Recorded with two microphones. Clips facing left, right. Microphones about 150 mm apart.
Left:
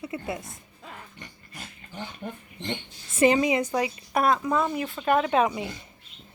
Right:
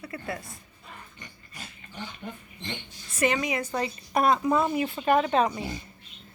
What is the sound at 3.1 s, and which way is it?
Speech, 30° left (ahead or behind).